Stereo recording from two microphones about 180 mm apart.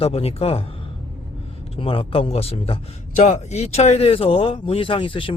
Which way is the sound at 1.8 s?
30° left (ahead or behind).